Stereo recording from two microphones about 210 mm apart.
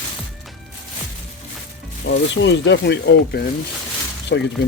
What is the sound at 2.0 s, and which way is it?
Speech, 60° left (ahead or behind).